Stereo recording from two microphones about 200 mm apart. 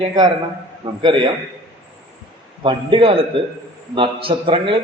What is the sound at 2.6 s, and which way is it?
A man's voice, 25° right (ahead or behind).